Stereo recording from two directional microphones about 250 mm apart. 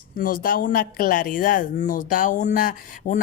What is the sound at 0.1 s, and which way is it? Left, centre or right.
Speech, left.